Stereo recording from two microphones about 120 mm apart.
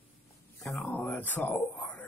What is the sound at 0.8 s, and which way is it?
Speech, 10° left (ahead or behind).